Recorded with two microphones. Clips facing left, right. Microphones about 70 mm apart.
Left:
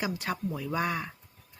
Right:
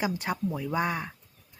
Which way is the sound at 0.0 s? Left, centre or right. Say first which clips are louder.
Right 3 dB; right.